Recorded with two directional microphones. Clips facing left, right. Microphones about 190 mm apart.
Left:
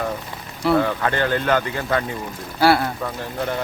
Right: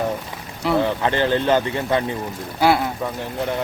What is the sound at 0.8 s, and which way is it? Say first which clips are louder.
Speech: right 1 dB; 20° right (ahead or behind).